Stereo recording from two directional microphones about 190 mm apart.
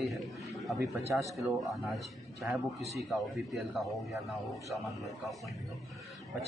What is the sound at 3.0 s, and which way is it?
Speech, centre (ahead or behind).